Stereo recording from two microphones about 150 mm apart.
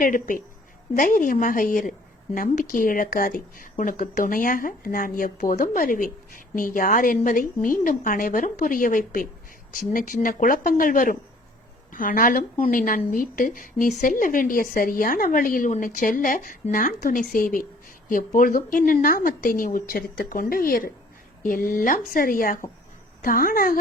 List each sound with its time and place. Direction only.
0.0 s a woman's voice: 65° left (ahead or behind)